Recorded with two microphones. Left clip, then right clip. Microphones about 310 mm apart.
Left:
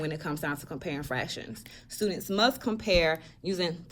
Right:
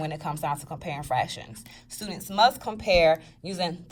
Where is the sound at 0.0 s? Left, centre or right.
Centre.